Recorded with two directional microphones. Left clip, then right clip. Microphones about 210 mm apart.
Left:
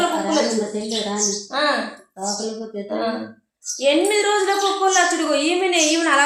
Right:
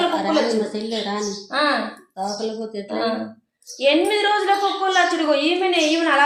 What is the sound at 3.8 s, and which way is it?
A woman's voice, 5° right (ahead or behind).